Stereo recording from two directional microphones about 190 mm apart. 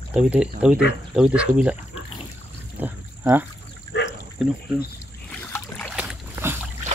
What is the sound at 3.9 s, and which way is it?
Dog, 65° left (ahead or behind).